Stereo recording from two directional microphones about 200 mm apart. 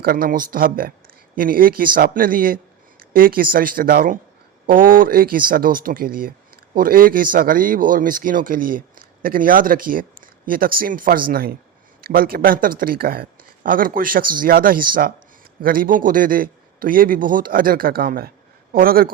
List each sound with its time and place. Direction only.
0.0 s a man's voice: 45° right (ahead or behind)